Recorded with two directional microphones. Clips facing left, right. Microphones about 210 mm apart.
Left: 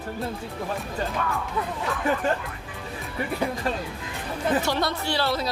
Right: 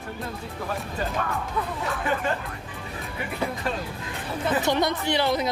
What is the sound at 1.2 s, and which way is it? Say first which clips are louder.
Speech: left 1 dB; 45° right (ahead or behind).